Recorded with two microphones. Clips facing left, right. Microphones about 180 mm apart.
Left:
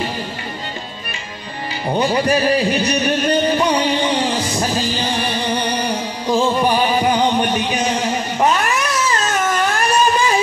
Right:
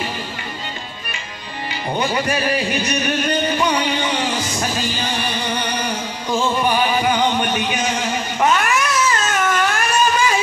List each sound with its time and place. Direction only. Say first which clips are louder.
2.0 s music: left 5 dB; 35° left (ahead or behind)